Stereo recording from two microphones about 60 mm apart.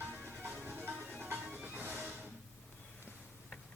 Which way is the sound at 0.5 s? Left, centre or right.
Right.